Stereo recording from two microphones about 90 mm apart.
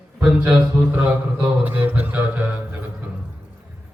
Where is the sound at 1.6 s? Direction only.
20° right (ahead or behind).